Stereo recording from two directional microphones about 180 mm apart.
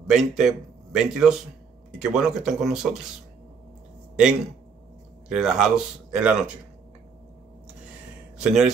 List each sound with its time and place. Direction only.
0.0 s speech: centre (ahead or behind)
5.3 s speech: 5° right (ahead or behind)
8.4 s speech: 5° right (ahead or behind)